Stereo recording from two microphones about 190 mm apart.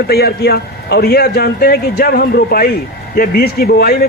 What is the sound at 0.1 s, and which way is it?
A man's voice, 55° left (ahead or behind).